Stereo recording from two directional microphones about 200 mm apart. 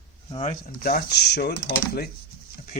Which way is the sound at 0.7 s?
50° left (ahead or behind).